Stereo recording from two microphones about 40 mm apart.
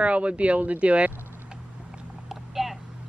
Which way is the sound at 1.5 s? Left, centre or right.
Centre.